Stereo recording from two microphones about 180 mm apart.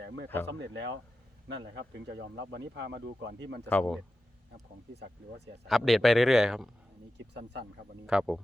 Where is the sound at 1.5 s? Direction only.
70° right (ahead or behind).